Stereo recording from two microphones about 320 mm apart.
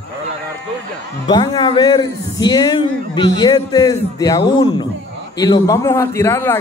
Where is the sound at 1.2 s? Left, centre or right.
Centre.